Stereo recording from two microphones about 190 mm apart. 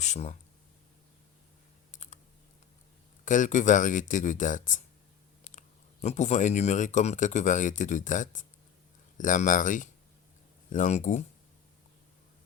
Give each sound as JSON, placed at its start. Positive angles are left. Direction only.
{"t": 0.0, "sound": "speech", "side_deg": 35}
{"t": 1.9, "sound": "computer keyboard", "side_deg": 40}
{"t": 3.2, "sound": "speech", "side_deg": 40}